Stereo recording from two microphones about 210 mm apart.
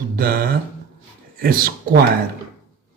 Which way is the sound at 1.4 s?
45° right (ahead or behind).